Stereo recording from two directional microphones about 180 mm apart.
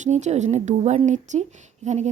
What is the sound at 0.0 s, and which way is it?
A woman's voice, 40° right (ahead or behind).